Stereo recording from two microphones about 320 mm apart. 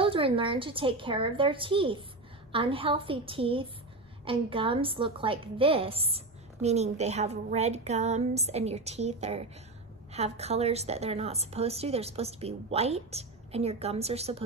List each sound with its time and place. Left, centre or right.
0.0 s a woman's voice: centre